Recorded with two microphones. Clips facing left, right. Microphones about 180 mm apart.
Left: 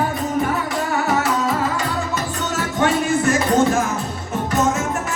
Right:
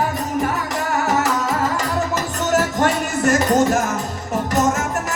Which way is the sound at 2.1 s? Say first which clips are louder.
Right 4 dB; 40° right (ahead or behind).